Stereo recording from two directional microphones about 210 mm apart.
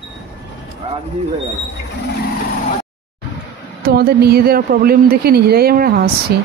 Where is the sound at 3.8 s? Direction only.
50° right (ahead or behind).